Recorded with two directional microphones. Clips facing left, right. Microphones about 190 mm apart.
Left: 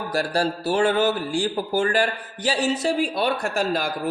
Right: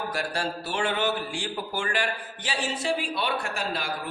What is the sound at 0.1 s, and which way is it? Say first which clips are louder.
A man's voice: left 7 dB; 40° left (ahead or behind).